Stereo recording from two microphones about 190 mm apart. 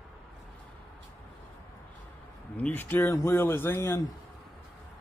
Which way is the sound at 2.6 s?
10° left (ahead or behind).